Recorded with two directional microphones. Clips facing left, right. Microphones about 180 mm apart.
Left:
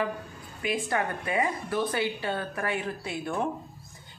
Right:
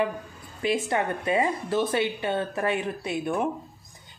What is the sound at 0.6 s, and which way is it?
Speech, 25° right (ahead or behind).